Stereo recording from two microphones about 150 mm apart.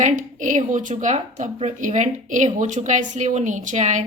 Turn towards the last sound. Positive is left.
turn(degrees=-55)  # may be behind; listen again after turning